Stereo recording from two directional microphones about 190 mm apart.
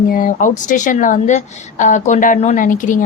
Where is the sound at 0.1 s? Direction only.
45° left (ahead or behind).